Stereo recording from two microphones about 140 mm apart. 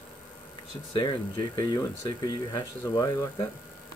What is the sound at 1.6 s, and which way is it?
Speech, 30° left (ahead or behind).